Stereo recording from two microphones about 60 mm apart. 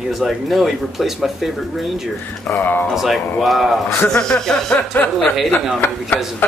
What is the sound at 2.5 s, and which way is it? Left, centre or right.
Speech, left.